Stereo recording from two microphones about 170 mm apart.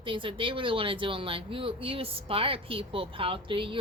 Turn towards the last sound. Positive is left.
turn(degrees=-30)  # may be behind; listen again after turning